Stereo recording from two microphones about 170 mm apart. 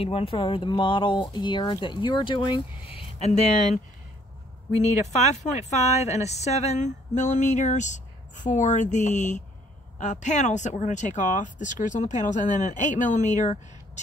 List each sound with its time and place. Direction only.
0.0 s speech: 35° left (ahead or behind)
4.9 s speech: 40° left (ahead or behind)